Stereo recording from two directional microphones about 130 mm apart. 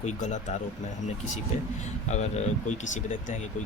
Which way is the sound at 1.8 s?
60° left (ahead or behind).